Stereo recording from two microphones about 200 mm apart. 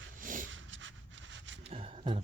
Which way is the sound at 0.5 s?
70° right (ahead or behind).